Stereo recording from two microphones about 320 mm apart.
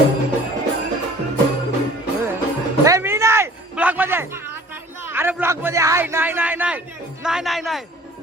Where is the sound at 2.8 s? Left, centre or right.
Centre.